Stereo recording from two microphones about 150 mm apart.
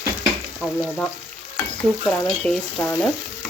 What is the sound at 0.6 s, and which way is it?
Frying, 5° left (ahead or behind).